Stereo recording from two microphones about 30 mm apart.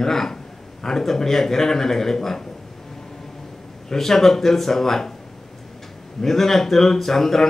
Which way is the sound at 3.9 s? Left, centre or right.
Centre.